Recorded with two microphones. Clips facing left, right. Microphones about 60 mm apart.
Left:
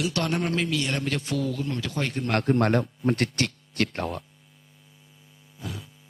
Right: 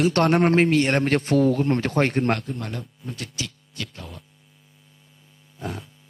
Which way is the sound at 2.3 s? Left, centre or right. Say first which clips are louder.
Left 5 dB; left.